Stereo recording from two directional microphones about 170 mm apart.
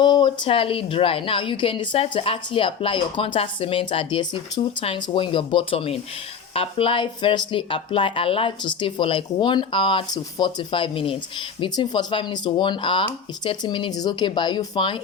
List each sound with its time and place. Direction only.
0.0 s a woman's voice: 25° left (ahead or behind)